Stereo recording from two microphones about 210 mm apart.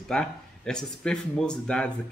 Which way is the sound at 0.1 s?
5° left (ahead or behind).